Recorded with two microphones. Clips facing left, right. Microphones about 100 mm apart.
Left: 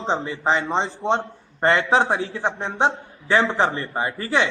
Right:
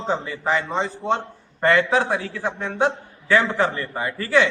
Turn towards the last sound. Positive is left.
turn(degrees=25)  # may be behind; listen again after turning